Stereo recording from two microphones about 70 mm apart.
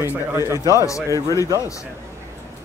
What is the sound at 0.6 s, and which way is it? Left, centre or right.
Speech, left.